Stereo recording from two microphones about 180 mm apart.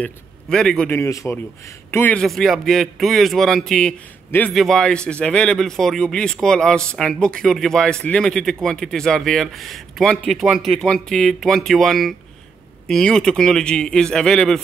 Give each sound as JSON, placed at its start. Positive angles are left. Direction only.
{"t": 0.0, "sound": "a man's voice", "side_deg": 5}